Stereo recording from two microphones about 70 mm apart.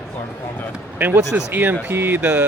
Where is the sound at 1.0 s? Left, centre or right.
Right.